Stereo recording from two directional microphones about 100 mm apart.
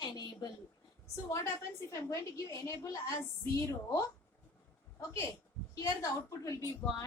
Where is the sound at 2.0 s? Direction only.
30° left (ahead or behind).